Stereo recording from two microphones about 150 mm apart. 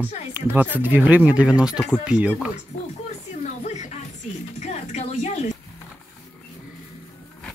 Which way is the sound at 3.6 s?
50° left (ahead or behind).